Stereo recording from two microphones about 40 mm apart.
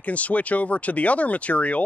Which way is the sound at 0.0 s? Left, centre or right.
Left.